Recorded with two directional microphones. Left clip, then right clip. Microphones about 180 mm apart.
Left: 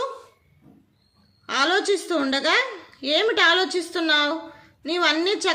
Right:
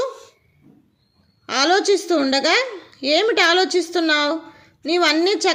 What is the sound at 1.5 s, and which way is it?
A woman's voice, 30° right (ahead or behind).